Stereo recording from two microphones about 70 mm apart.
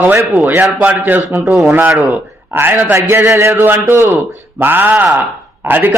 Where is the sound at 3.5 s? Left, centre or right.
Right.